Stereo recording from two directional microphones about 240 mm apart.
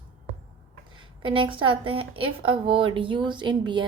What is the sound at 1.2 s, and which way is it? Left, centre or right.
A woman's voice, right.